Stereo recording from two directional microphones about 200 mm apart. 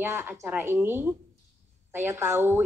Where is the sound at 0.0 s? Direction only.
10° right (ahead or behind).